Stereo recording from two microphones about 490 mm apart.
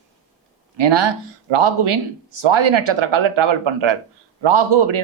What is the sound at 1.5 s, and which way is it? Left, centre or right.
Speech, right.